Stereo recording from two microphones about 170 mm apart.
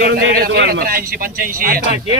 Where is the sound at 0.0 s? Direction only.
75° right (ahead or behind).